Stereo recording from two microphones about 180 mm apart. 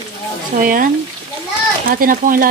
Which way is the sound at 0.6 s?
50° right (ahead or behind).